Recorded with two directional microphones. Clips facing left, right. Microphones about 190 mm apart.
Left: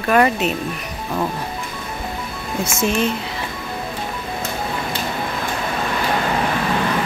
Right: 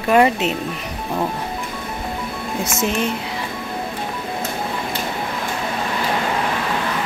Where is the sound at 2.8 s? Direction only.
15° right (ahead or behind).